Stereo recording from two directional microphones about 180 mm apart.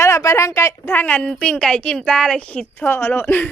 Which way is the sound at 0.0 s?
15° left (ahead or behind).